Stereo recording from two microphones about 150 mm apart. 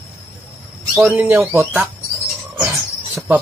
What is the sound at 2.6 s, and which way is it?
Cricket, 20° right (ahead or behind).